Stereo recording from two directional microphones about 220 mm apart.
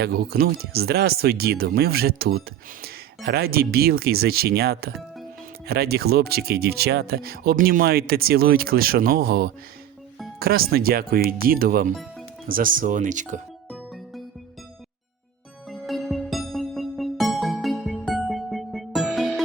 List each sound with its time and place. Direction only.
0.0 s speech: 45° right (ahead or behind)
15.7 s music: centre (ahead or behind)